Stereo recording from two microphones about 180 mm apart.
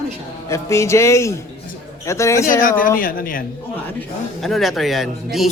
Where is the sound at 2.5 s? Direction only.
50° left (ahead or behind).